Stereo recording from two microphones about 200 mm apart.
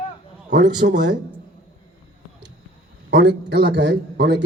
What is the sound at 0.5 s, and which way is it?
Speech, 60° right (ahead or behind).